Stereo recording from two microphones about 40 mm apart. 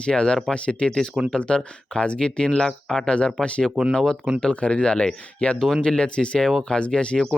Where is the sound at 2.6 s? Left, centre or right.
Centre.